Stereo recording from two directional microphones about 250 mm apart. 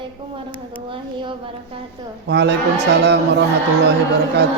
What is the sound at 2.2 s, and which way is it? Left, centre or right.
A man's voice, right.